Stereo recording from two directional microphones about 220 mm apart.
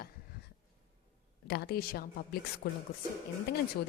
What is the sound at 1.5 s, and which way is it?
Speech, 45° left (ahead or behind).